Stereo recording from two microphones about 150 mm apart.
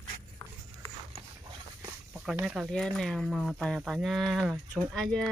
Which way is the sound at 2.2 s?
5° right (ahead or behind).